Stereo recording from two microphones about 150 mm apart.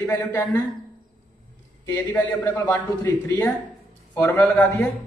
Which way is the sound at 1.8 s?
10° left (ahead or behind).